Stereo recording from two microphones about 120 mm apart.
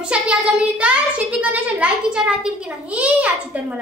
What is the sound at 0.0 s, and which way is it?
A child's voice, 10° right (ahead or behind).